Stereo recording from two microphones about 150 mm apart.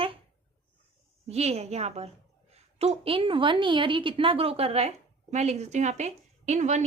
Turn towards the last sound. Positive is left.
turn(degrees=-50)  # may be behind; listen again after turning